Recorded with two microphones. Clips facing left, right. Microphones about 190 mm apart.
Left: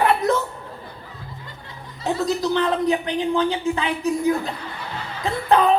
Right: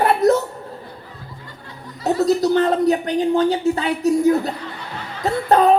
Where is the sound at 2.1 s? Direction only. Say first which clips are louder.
Right 5 dB; 40° right (ahead or behind).